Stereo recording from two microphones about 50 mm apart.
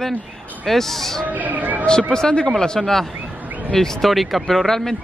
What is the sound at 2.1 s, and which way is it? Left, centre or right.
Speech, centre.